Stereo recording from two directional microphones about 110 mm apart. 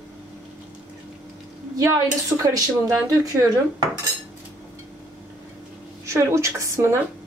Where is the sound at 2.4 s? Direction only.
30° right (ahead or behind).